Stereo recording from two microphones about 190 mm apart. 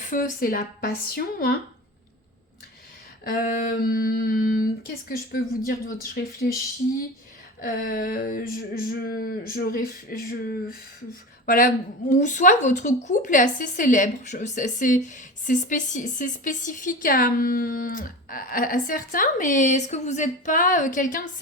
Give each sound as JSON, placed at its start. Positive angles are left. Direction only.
{"t": 0.0, "sound": "a woman's voice", "side_deg": 45}
{"t": 3.2, "sound": "a woman's voice", "side_deg": 50}
{"t": 7.6, "sound": "a woman's voice", "side_deg": 50}